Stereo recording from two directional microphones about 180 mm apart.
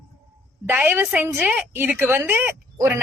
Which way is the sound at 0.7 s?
10° right (ahead or behind).